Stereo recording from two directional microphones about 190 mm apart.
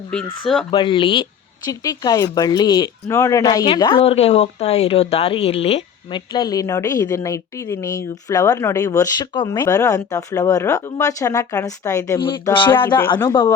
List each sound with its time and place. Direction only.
0.7 s speech: 25° left (ahead or behind)
4.0 s speech: 35° left (ahead or behind)